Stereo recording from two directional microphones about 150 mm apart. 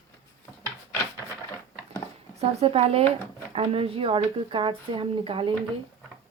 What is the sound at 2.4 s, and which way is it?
Speech, 45° right (ahead or behind).